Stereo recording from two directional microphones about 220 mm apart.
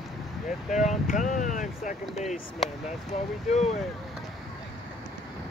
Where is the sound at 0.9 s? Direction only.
35° left (ahead or behind).